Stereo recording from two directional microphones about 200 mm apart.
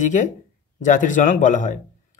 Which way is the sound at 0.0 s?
40° left (ahead or behind).